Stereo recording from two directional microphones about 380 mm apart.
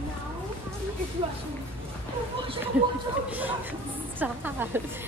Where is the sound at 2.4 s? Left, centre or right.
Centre.